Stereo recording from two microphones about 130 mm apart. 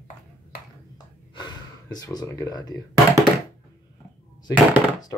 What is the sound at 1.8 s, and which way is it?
Speech, 30° left (ahead or behind).